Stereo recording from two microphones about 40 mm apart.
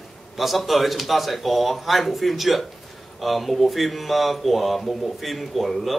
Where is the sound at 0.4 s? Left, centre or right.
Centre.